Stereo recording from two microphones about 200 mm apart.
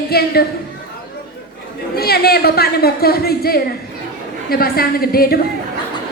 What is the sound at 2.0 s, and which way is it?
A woman's voice, 50° left (ahead or behind).